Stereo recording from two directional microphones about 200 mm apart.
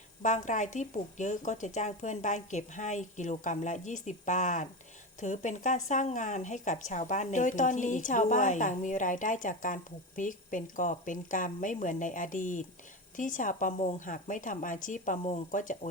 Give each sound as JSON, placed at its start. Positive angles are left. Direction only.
{"t": 0.2, "sound": "a woman's voice", "side_deg": 40}